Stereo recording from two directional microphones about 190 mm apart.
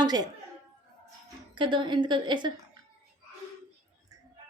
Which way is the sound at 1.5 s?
25° right (ahead or behind).